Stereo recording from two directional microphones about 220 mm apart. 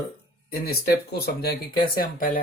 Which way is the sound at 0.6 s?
45° left (ahead or behind).